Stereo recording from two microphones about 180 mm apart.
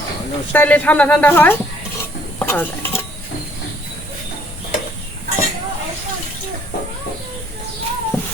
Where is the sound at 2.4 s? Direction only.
10° left (ahead or behind).